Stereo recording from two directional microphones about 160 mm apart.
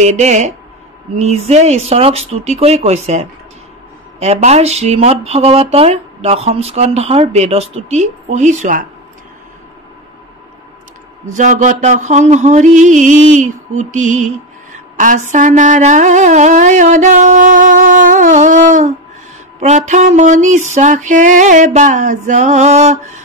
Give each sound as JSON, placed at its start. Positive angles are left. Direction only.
{"t": 0.0, "sound": "music", "side_deg": -45}
{"t": 1.1, "sound": "speech", "side_deg": -40}
{"t": 11.3, "sound": "music", "side_deg": -50}